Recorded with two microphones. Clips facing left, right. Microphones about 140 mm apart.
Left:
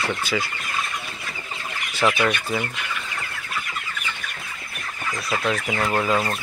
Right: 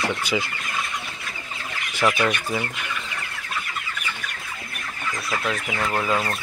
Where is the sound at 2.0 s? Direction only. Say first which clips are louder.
Left 1 dB; 5° left (ahead or behind).